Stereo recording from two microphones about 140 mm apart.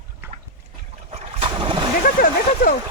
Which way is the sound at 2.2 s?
90° left.